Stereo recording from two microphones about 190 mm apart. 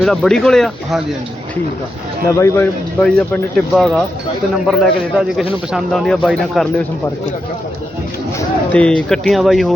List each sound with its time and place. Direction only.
0.0 s speech: centre (ahead or behind)
2.2 s speech: 15° left (ahead or behind)
3.0 s speech: 5° left (ahead or behind)
8.4 s speech: 5° left (ahead or behind)